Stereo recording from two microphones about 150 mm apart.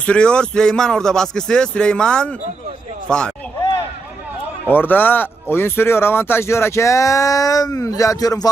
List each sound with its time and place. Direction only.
0.0 s speech: 5° left (ahead or behind)
4.7 s speech: 10° left (ahead or behind)